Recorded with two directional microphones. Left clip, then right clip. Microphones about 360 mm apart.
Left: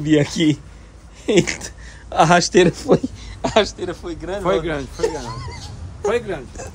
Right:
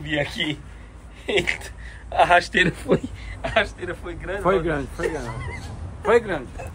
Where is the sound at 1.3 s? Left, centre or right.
Left.